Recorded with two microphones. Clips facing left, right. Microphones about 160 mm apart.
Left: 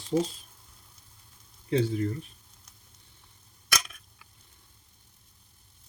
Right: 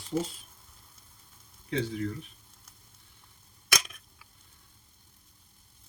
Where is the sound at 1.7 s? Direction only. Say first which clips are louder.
Left 5 dB; 35° left (ahead or behind).